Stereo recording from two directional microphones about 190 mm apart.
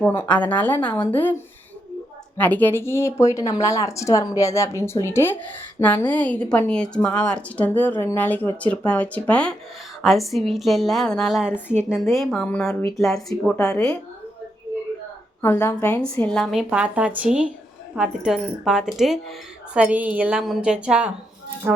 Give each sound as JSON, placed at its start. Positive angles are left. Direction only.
{"t": 0.0, "sound": "speech", "side_deg": 10}
{"t": 2.4, "sound": "speech", "side_deg": 10}
{"t": 15.4, "sound": "a woman's voice", "side_deg": 10}